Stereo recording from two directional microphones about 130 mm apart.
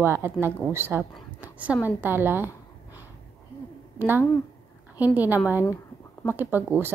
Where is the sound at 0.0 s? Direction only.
20° right (ahead or behind).